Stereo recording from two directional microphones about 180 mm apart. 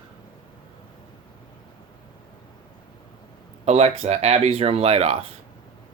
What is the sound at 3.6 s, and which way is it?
Speech, 35° right (ahead or behind).